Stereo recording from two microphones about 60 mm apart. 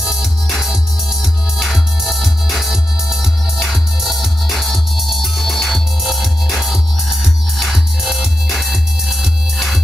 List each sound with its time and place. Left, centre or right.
0.0 s music: centre